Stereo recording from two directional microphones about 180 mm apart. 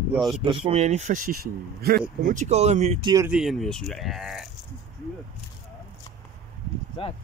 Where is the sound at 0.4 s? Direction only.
30° right (ahead or behind).